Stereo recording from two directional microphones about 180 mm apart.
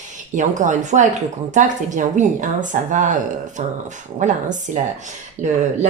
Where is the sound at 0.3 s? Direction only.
45° right (ahead or behind).